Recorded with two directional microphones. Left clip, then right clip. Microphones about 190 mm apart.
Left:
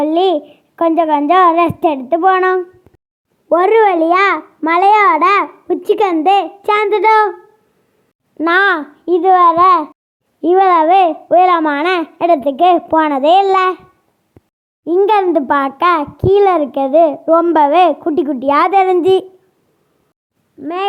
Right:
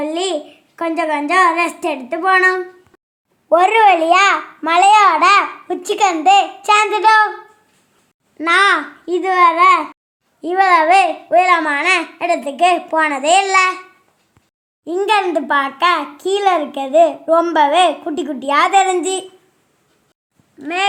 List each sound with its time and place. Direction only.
0.0 s a child's voice: 40° left (ahead or behind)
8.4 s a child's voice: 45° left (ahead or behind)
14.8 s a child's voice: 50° left (ahead or behind)
20.6 s speech: 40° left (ahead or behind)